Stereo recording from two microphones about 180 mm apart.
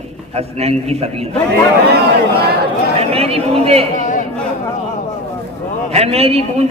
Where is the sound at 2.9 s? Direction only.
35° right (ahead or behind).